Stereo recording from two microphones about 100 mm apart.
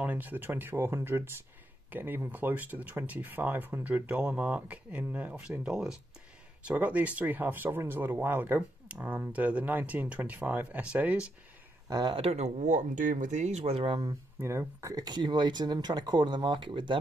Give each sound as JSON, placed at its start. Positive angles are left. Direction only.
{"t": 0.0, "sound": "speech", "side_deg": -15}
{"t": 11.9, "sound": "speech", "side_deg": -45}
{"t": 12.2, "sound": "speech", "side_deg": -90}
{"t": 14.4, "sound": "speech", "side_deg": -25}